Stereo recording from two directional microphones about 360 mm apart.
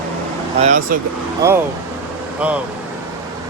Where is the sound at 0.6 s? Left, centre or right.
Right.